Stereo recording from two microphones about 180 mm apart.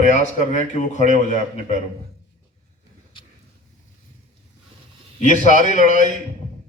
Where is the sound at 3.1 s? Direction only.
25° left (ahead or behind).